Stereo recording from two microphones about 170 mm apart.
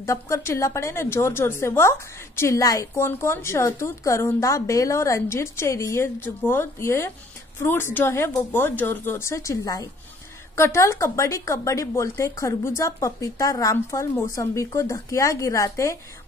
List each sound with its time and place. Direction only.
0.0 s a woman's voice: 20° left (ahead or behind)